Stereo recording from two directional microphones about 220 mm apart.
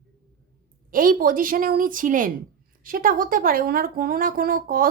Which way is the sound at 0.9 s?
40° right (ahead or behind).